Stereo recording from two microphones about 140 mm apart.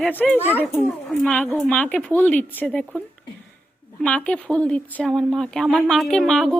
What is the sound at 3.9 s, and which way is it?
A woman's voice, 10° left (ahead or behind).